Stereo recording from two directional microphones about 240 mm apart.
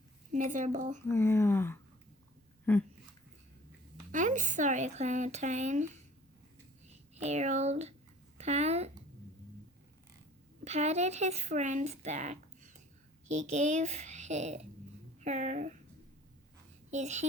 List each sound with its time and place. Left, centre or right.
0.3 s a woman's voice: right
1.1 s speech: centre
4.1 s speech: right
7.2 s speech: right
10.6 s speech: right
16.9 s speech: right